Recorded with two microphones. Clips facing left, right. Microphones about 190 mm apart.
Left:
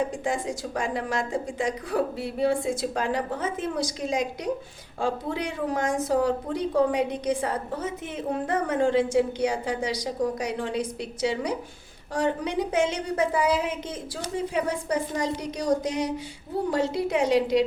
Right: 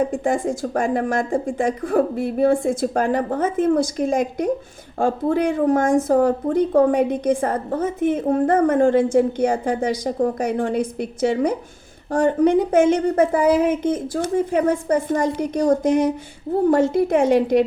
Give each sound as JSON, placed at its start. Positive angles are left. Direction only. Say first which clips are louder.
{"t": 0.0, "sound": "speech", "louder": "right 7 dB", "side_deg": -50}